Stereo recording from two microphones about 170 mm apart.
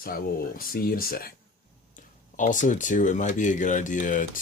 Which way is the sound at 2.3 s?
50° left (ahead or behind).